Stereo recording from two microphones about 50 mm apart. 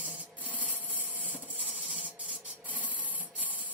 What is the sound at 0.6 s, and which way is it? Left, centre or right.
Sawing, right.